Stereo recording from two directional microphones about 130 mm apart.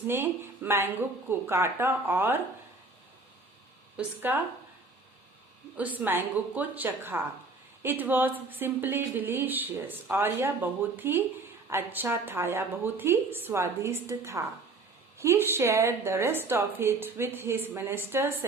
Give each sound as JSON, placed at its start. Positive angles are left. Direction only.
{"t": 0.1, "sound": "a woman's voice", "side_deg": -15}
{"t": 3.9, "sound": "a woman's voice", "side_deg": -15}
{"t": 5.7, "sound": "a woman's voice", "side_deg": -10}